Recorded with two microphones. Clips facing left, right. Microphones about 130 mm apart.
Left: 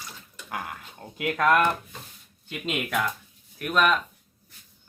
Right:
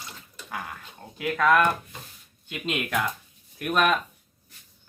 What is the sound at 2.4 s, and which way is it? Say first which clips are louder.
Speech: even; centre (ahead or behind).